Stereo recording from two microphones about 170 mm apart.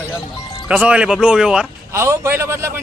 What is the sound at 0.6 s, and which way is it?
Speech, 5° right (ahead or behind).